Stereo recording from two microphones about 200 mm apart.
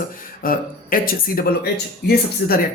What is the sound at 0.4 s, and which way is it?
Speech, 45° left (ahead or behind).